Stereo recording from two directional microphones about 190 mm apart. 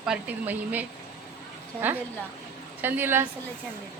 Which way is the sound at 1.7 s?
10° left (ahead or behind).